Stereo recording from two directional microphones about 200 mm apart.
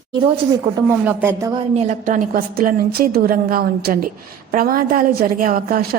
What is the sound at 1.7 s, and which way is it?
A woman's voice, 40° right (ahead or behind).